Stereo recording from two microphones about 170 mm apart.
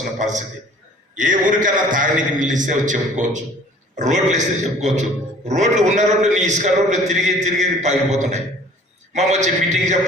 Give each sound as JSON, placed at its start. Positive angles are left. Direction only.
{"t": 0.2, "sound": "a man's voice", "side_deg": -45}